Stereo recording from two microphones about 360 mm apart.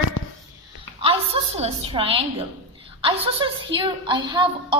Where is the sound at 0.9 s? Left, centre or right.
Centre.